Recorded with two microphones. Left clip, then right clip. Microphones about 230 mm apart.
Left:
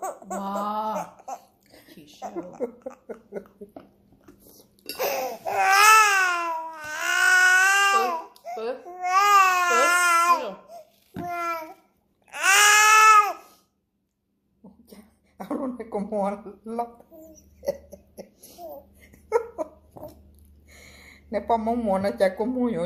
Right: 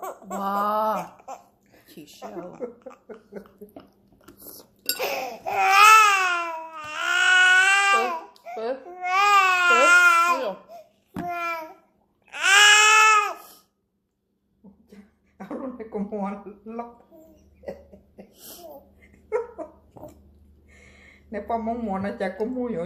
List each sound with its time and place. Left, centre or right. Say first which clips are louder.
0.3 s laughter: right 5 dB; right
0.9 s a sound: even; centre
2.2 s a woman's voice: left 3 dB; centre
4.4 s chink: right 9 dB; right
4.9 s baby cry: left 3 dB; centre
9.0 s baby cry: left 1 dB; centre
11.2 s babbling: even; centre
12.3 s baby cry: right 2 dB; centre
15.4 s cough: left 3 dB; left
20.7 s a sound: left 3 dB; left